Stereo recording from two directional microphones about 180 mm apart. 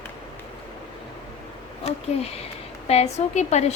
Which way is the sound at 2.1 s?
35° left (ahead or behind).